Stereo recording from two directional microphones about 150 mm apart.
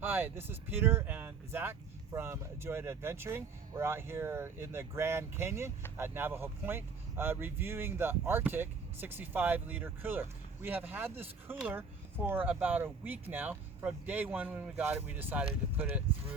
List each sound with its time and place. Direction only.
0.0 s speech: 15° right (ahead or behind)